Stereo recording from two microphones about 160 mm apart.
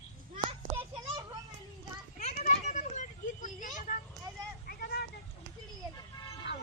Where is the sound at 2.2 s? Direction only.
45° left (ahead or behind).